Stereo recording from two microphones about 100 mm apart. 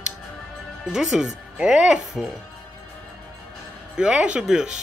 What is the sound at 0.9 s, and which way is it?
Speech, 5° right (ahead or behind).